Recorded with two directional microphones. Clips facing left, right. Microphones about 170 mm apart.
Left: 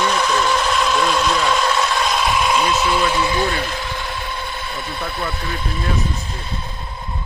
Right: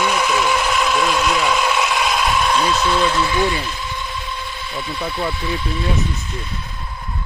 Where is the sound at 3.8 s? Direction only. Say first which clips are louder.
Left 1 dB; 70° left (ahead or behind).